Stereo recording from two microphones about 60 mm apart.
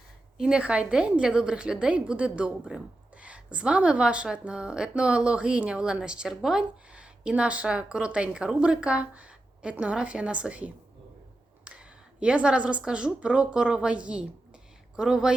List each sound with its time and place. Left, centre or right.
0.3 s a woman's voice: centre
12.2 s speech: centre